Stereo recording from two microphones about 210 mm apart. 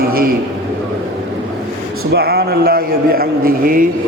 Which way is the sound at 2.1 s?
50° right (ahead or behind).